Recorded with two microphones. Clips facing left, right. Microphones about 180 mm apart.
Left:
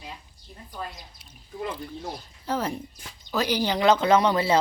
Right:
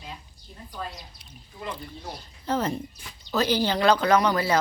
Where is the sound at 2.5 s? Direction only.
10° left (ahead or behind).